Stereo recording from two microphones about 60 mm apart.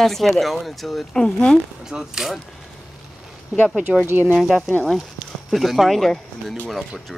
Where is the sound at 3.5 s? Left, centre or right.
Centre.